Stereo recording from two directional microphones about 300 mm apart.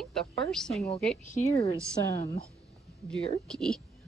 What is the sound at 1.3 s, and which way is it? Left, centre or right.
Speech, left.